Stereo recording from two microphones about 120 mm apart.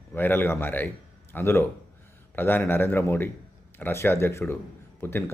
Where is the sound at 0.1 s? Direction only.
15° left (ahead or behind).